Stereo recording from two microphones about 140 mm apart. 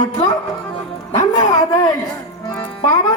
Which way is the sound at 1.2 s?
25° left (ahead or behind).